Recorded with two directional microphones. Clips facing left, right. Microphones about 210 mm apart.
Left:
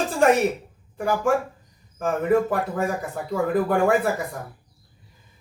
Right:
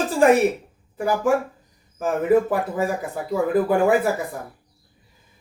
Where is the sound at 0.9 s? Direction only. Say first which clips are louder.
Right 2 dB; 5° right (ahead or behind).